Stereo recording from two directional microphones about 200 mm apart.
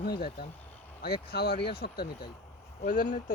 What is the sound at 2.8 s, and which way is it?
Speech, 40° left (ahead or behind).